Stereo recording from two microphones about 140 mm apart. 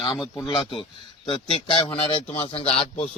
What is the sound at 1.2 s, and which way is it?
Speech, 40° left (ahead or behind).